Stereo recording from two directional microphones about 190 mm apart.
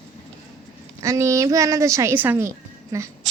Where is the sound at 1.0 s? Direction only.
15° right (ahead or behind).